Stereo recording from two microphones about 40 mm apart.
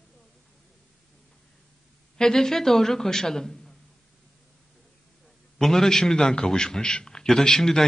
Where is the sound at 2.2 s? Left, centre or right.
Centre.